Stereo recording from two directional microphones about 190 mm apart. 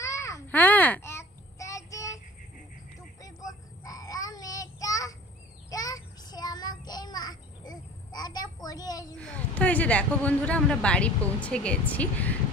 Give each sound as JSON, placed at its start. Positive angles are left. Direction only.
{"t": 0.0, "sound": "a sound", "side_deg": 15}
{"t": 3.2, "sound": "child singing", "side_deg": 20}
{"t": 9.1, "sound": "speech", "side_deg": 5}